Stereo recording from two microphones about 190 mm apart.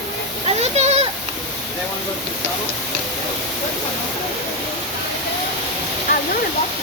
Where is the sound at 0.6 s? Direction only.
35° right (ahead or behind).